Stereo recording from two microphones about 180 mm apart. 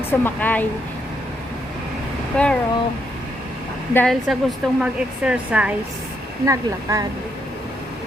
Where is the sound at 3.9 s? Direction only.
5° left (ahead or behind).